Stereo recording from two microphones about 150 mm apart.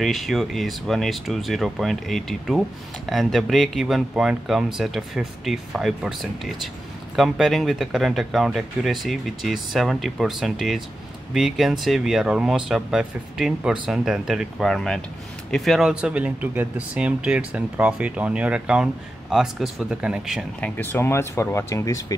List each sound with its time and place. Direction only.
0.0 s speech: centre (ahead or behind)
20.6 s speech: 10° left (ahead or behind)